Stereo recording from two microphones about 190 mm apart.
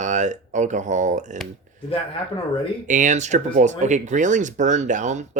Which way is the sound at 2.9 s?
40° right (ahead or behind).